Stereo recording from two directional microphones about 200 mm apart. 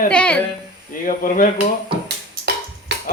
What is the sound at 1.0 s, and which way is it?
Speech, 40° left (ahead or behind).